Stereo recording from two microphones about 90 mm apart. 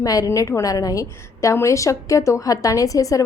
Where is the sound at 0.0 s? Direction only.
40° left (ahead or behind).